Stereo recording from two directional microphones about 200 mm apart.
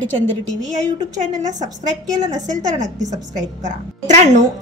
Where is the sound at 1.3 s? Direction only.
35° right (ahead or behind).